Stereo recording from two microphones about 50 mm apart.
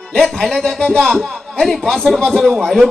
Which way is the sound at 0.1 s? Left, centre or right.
Centre.